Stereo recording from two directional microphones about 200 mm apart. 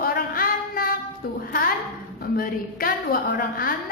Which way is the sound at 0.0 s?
45° left (ahead or behind).